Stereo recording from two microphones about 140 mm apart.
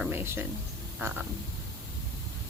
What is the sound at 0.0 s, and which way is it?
Speech, 15° right (ahead or behind).